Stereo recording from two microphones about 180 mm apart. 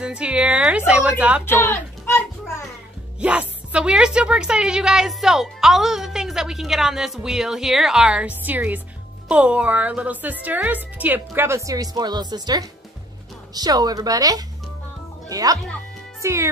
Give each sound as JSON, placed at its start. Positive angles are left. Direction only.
{"t": 0.0, "sound": "a woman's voice", "side_deg": -5}
{"t": 1.4, "sound": "a sound", "side_deg": 15}
{"t": 3.2, "sound": "a woman's voice", "side_deg": -5}